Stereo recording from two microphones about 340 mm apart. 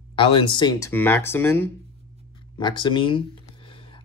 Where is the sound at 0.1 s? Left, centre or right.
Centre.